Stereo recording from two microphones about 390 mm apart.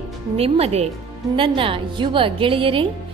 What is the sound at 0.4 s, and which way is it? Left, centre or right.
A woman's voice, centre.